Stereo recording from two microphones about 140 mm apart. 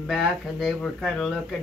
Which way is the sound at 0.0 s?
Centre (ahead or behind).